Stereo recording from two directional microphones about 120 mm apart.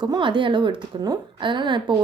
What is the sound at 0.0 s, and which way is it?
A woman's voice, 40° right (ahead or behind).